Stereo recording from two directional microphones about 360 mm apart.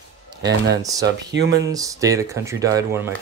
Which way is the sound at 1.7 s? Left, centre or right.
Centre.